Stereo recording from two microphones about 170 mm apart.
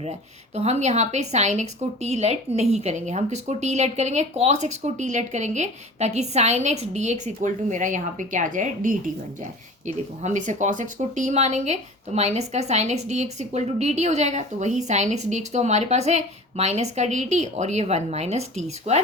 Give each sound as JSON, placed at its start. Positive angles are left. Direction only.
{"t": 0.0, "sound": "a woman's voice", "side_deg": -40}